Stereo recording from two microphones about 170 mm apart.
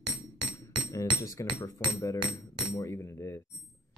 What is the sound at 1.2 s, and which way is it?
Speech, 20° left (ahead or behind).